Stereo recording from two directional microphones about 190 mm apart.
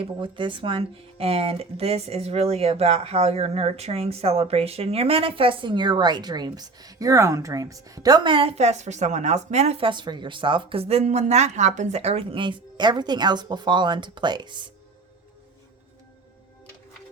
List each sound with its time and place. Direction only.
0.0 s speech: 25° right (ahead or behind)